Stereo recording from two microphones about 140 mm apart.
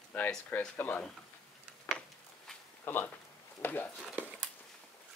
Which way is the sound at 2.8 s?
15° left (ahead or behind).